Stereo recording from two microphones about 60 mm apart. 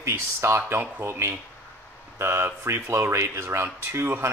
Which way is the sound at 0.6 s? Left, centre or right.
Right.